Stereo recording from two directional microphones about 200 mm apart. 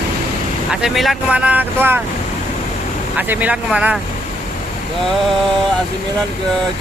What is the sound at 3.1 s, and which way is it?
Speech, 5° right (ahead or behind).